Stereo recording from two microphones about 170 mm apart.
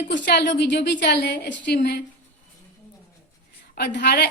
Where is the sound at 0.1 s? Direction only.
75° left (ahead or behind).